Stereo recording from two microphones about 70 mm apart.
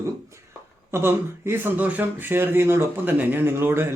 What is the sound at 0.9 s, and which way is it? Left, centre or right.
Speech, right.